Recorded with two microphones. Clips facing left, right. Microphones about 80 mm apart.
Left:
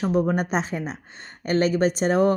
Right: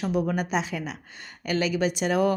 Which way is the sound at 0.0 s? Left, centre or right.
Left.